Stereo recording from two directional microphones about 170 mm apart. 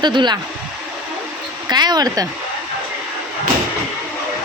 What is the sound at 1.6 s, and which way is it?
Speech, 25° right (ahead or behind).